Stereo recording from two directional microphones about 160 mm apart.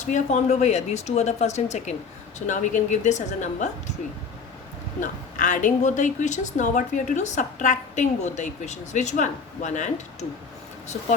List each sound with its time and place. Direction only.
0.0 s a woman's voice: 45° left (ahead or behind)
4.9 s a woman's voice: 50° left (ahead or behind)